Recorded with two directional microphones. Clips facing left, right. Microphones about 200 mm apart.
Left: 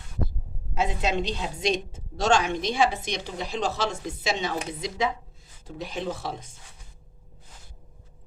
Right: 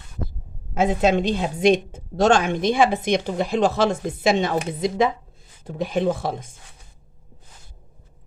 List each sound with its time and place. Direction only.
0.7 s a woman's voice: 50° right (ahead or behind)